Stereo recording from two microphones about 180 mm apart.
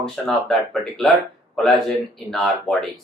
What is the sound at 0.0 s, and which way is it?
Speech, centre (ahead or behind).